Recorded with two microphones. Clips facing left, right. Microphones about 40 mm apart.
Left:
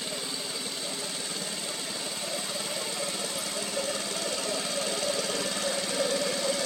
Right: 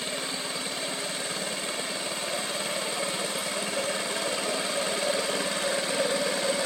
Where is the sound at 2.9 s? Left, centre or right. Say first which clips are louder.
Right 3 dB; right.